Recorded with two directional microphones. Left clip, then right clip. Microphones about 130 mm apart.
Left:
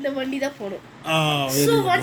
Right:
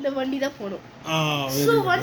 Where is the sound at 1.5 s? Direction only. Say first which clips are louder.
Right 1 dB; 65° right (ahead or behind).